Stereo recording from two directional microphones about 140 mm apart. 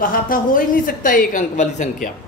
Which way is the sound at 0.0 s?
90° left.